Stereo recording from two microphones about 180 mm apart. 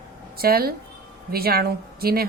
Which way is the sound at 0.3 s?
55° right (ahead or behind).